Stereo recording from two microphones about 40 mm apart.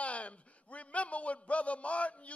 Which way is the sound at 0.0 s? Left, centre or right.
Left.